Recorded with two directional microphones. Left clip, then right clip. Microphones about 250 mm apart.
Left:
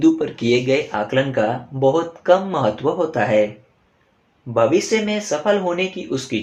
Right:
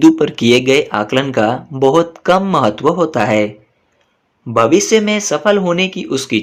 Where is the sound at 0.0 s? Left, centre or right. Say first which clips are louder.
Right 7 dB; right.